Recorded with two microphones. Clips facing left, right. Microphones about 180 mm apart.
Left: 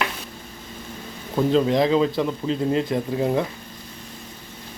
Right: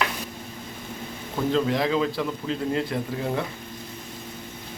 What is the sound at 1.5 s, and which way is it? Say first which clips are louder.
Speech: left 5 dB; 20° left (ahead or behind).